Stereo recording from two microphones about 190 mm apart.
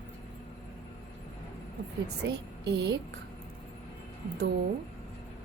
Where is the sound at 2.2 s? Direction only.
65° right (ahead or behind).